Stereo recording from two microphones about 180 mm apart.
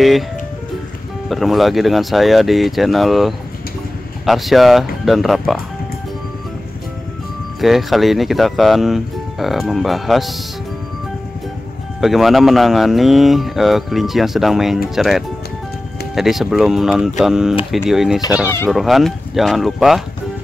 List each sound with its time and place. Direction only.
1.3 s a man's voice: centre (ahead or behind)
7.6 s a man's voice: centre (ahead or behind)
12.0 s a man's voice: centre (ahead or behind)